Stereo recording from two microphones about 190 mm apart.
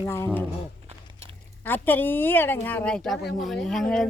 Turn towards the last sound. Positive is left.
turn(degrees=5)  # may be behind; listen again after turning